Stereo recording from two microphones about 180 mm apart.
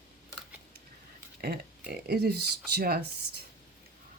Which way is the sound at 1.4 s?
55° right (ahead or behind).